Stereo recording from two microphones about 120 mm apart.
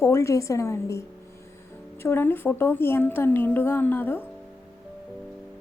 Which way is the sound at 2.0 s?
20° left (ahead or behind).